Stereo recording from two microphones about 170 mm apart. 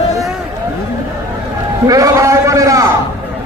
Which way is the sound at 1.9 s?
20° right (ahead or behind).